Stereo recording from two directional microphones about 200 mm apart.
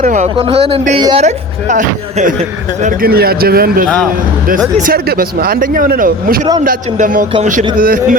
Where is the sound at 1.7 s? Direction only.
40° right (ahead or behind).